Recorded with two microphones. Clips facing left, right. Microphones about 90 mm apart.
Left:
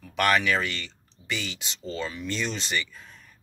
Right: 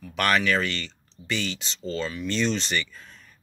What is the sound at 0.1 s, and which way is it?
Speech, 15° left (ahead or behind).